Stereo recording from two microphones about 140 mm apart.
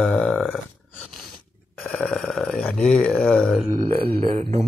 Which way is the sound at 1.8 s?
10° left (ahead or behind).